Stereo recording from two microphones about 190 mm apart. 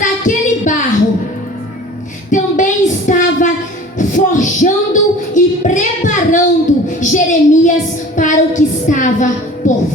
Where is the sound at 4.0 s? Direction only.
40° left (ahead or behind).